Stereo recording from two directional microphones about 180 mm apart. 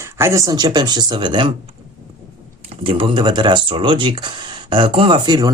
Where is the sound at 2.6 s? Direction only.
30° right (ahead or behind).